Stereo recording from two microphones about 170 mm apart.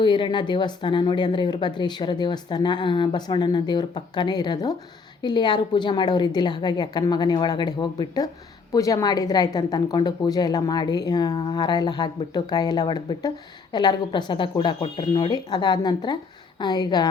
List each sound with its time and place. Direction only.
0.0 s speech: 25° left (ahead or behind)